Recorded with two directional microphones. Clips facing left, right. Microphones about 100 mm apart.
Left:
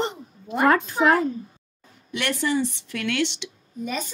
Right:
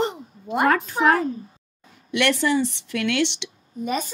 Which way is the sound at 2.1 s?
80° right.